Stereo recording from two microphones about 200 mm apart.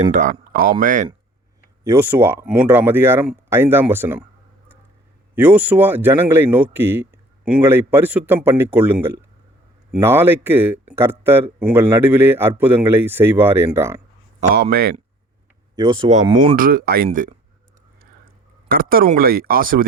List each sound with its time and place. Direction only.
0.1 s speech: 40° right (ahead or behind)
1.8 s a man's voice: 15° right (ahead or behind)
5.3 s a man's voice: 10° right (ahead or behind)
14.5 s speech: 50° right (ahead or behind)
15.7 s speech: 20° right (ahead or behind)
16.6 s speech: 45° right (ahead or behind)
18.7 s speech: 50° right (ahead or behind)